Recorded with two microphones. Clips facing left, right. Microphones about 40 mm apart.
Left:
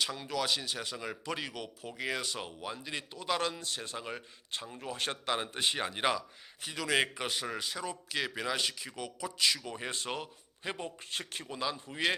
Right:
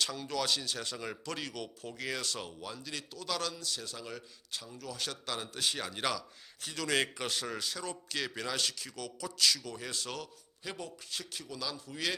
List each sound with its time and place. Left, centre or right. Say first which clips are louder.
0.0 s a man's voice: left 1 dB; centre; by 12.1 s left